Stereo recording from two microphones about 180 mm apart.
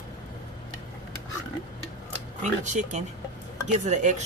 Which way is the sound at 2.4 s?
40° right (ahead or behind).